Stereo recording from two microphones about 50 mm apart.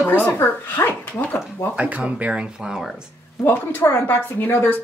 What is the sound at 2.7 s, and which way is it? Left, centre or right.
Speech, centre.